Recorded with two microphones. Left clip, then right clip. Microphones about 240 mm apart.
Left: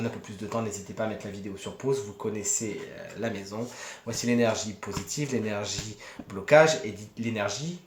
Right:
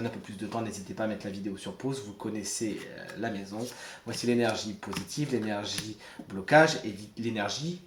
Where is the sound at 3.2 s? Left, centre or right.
Left.